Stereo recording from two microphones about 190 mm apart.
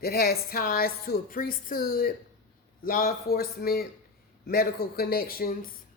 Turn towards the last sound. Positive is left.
turn(degrees=50)  # may be behind; listen again after turning